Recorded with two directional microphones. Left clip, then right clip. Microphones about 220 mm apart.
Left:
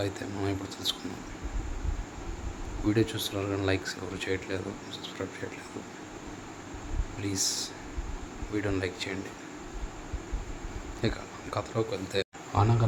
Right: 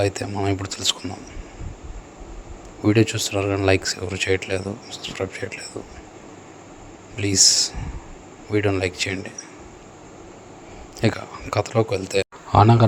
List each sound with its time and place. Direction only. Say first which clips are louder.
0.0 s speech: right 10 dB; 35° right (ahead or behind)
2.8 s speech: right 9 dB; 35° right (ahead or behind)
7.2 s speech: right 14 dB; 35° right (ahead or behind)
11.0 s speech: right 10 dB; 35° right (ahead or behind)